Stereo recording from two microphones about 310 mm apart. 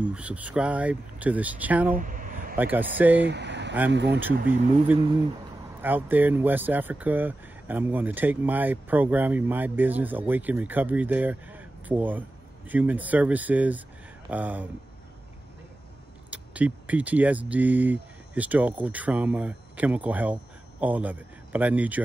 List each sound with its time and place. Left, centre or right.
0.0 s speech: centre
2.0 s a sound: right
2.5 s speech: centre
3.2 s speech: right
4.2 s speech: centre
16.3 s speech: centre